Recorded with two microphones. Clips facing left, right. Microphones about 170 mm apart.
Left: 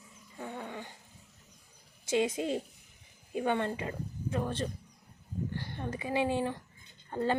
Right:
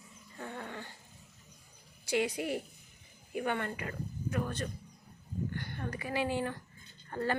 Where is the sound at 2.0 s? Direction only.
20° left (ahead or behind).